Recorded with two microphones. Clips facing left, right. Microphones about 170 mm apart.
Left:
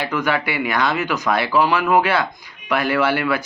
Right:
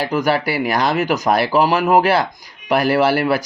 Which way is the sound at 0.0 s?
40° right (ahead or behind).